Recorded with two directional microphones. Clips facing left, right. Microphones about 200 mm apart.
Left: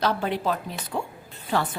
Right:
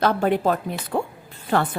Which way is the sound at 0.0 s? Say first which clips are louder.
Right 5 dB; 50° right (ahead or behind).